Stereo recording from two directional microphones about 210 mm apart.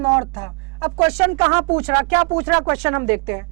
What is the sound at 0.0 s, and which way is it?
Speech, 15° right (ahead or behind).